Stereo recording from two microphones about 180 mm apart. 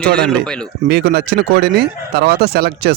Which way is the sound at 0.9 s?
60° right (ahead or behind).